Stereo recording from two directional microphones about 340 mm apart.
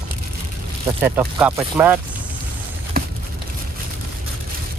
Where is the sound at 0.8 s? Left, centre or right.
Centre.